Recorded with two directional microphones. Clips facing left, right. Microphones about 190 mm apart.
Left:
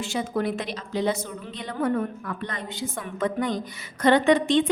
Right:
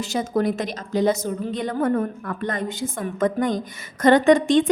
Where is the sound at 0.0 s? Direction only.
40° right (ahead or behind).